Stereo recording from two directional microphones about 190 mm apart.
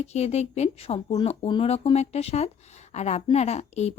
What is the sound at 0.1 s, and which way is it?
A woman's voice, 35° left (ahead or behind).